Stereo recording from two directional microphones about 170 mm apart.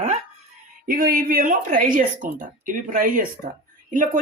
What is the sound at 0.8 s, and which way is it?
Speech, 55° right (ahead or behind).